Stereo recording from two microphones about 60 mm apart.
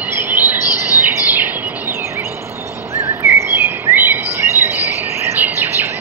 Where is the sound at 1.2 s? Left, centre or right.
Right.